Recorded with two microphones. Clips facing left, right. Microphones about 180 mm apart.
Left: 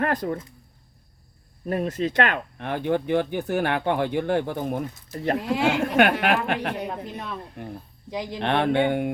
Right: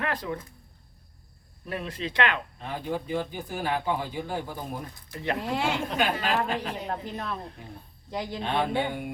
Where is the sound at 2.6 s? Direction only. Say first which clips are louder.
Left 7 dB; 70° left (ahead or behind).